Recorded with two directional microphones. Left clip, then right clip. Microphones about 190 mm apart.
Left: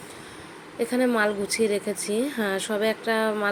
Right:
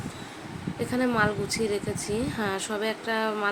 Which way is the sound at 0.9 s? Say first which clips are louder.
Left 2 dB; 15° left (ahead or behind).